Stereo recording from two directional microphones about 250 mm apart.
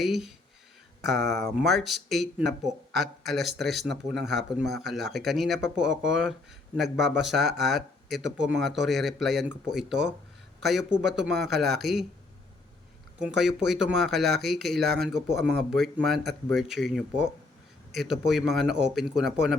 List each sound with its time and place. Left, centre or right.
0.0 s speech: centre
13.1 s speech: centre